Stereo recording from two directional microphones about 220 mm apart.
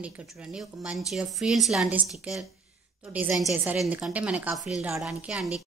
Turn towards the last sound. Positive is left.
turn(degrees=-5)  # may be behind; listen again after turning